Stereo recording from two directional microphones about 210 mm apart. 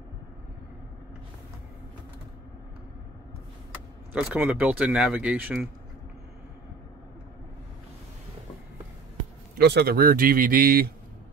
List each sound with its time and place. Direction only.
4.1 s speech: 5° right (ahead or behind)
9.6 s speech: 50° right (ahead or behind)